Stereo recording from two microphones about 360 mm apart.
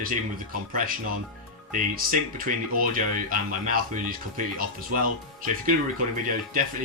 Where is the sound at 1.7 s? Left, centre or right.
Right.